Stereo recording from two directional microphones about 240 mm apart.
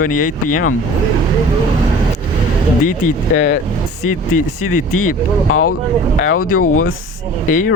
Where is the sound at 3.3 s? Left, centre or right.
Left.